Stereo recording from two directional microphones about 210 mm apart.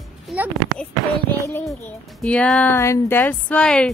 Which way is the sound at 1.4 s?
10° left (ahead or behind).